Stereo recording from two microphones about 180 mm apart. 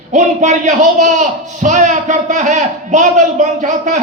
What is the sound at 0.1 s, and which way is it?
A man's voice, 40° right (ahead or behind).